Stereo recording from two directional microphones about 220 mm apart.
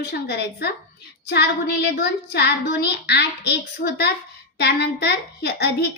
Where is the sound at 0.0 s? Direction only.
45° left (ahead or behind).